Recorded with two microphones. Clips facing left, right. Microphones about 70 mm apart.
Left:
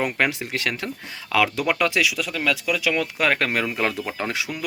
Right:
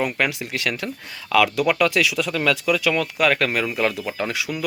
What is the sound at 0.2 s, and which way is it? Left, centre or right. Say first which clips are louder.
Speech: even; left.